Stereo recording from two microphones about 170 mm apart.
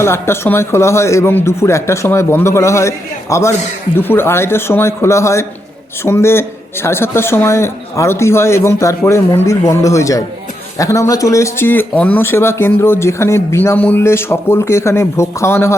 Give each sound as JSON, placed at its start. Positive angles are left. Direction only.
{"t": 0.0, "sound": "speech", "side_deg": 15}